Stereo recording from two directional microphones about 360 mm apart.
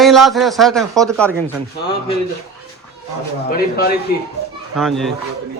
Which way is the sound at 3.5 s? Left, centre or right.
Left.